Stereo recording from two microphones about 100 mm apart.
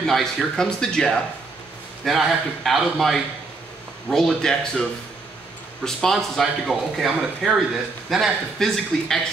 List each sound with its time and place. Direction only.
0.0 s speech: 5° left (ahead or behind)
5.9 s speech: 5° left (ahead or behind)